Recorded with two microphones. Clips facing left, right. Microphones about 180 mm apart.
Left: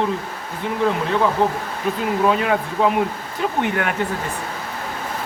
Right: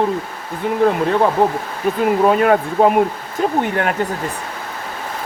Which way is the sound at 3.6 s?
40° right (ahead or behind).